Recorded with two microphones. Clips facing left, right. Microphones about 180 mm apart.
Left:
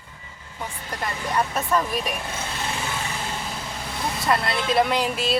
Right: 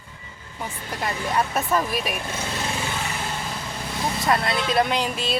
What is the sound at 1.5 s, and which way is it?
Speech, 5° right (ahead or behind).